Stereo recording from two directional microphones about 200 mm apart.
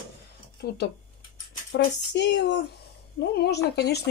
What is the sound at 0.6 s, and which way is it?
Speech, 60° left (ahead or behind).